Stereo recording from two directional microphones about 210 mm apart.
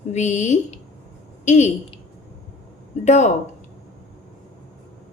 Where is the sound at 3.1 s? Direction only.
35° left (ahead or behind).